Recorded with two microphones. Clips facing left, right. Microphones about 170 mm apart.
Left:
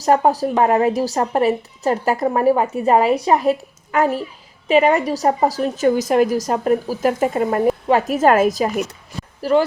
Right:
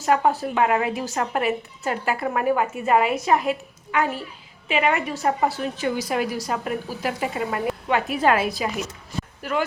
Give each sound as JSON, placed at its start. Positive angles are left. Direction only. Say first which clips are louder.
{"t": 0.0, "sound": "a woman's voice", "louder": "left 5 dB", "side_deg": 40}